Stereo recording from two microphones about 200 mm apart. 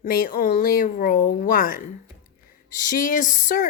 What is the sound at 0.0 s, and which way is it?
Speech, 45° left (ahead or behind).